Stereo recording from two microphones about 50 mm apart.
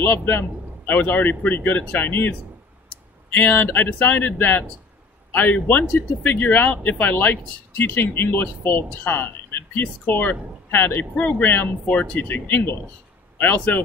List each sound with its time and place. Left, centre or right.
0.0 s speech: left